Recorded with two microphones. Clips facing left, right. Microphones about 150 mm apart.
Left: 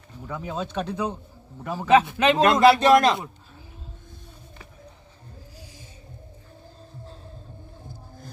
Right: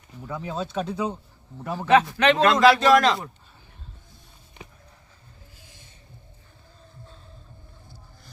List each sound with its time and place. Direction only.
0.3 s speech: 5° left (ahead or behind)
0.7 s speech: 5° right (ahead or behind)
1.6 s a man's voice: 5° left (ahead or behind)
2.5 s a man's voice: 20° left (ahead or behind)